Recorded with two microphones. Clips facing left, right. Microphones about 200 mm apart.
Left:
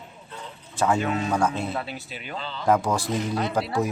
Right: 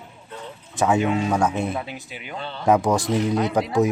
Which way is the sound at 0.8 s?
15° right (ahead or behind).